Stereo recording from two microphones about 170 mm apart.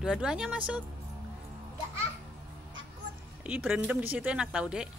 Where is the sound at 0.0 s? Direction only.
5° right (ahead or behind).